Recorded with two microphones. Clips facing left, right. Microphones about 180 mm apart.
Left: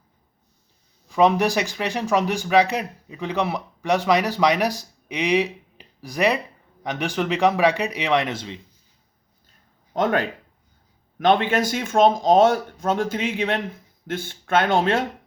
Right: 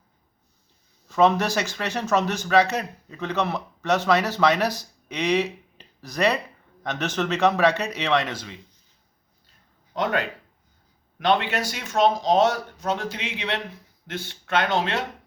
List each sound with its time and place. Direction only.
1.0 s speech: 15° left (ahead or behind)
9.9 s speech: 45° left (ahead or behind)